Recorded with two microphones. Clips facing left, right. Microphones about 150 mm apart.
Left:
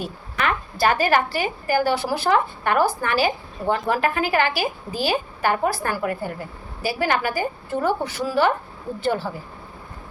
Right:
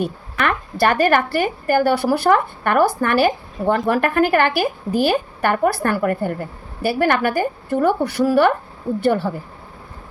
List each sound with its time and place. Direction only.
0.0 s a woman's voice: 60° right (ahead or behind)